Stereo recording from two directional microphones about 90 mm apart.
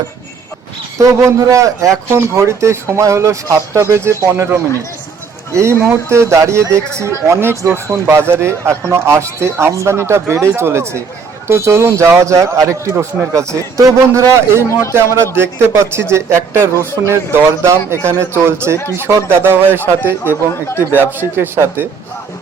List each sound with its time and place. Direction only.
0.9 s a man's voice: 35° right (ahead or behind)
14.7 s speech: 30° left (ahead or behind)
14.9 s a man's voice: 30° right (ahead or behind)
20.5 s speech: 30° left (ahead or behind)
20.9 s a man's voice: 25° right (ahead or behind)